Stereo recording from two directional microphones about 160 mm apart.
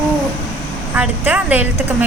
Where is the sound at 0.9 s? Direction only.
10° right (ahead or behind).